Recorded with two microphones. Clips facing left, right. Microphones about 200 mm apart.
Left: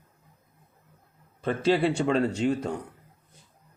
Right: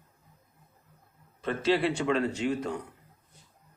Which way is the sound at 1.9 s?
30° left (ahead or behind).